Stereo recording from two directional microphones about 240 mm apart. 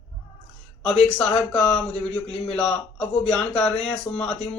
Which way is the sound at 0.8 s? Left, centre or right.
Centre.